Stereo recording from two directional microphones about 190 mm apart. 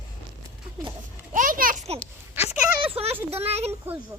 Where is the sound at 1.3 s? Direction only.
45° right (ahead or behind).